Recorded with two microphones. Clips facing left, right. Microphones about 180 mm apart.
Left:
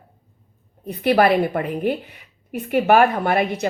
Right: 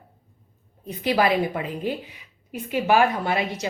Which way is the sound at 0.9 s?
60° left (ahead or behind).